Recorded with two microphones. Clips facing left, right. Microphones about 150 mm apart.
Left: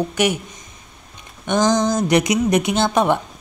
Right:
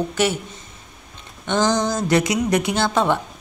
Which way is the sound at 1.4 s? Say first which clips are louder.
Left 2 dB; 20° left (ahead or behind).